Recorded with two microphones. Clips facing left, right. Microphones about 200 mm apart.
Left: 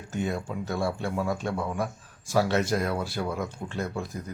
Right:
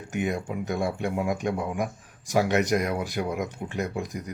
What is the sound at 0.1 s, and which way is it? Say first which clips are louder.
Speech: right 2 dB; 15° right (ahead or behind).